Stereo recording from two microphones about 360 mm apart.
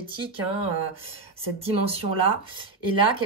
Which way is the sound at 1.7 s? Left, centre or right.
Centre.